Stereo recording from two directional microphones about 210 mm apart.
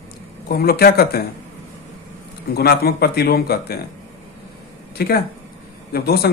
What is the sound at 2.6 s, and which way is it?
A man's voice, 45° left (ahead or behind).